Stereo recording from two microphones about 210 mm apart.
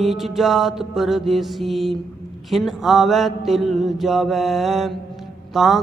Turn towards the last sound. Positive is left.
turn(degrees=0)  # may be behind; listen again after turning